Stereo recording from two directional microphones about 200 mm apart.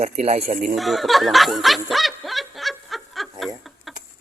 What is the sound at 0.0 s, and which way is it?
Speech, 30° right (ahead or behind).